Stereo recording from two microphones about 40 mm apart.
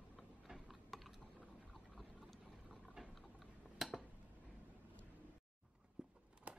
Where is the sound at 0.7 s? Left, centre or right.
Centre.